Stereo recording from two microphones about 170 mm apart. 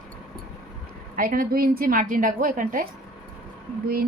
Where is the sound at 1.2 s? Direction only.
55° right (ahead or behind).